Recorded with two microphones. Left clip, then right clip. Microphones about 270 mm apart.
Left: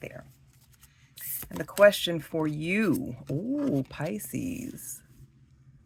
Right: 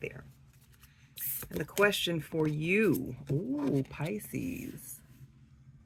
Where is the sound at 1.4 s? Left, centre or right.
Left.